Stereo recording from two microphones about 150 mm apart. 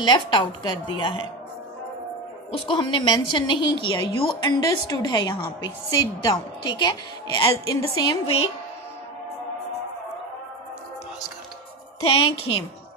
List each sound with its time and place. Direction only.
0.0 s a woman's voice: 30° left (ahead or behind)
2.5 s a woman's voice: 35° left (ahead or behind)
12.0 s a woman's voice: 40° left (ahead or behind)